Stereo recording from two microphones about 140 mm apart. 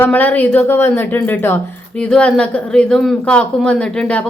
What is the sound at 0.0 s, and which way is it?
A woman's voice, 10° left (ahead or behind).